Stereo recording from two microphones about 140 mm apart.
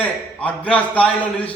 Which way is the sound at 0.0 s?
10° left (ahead or behind).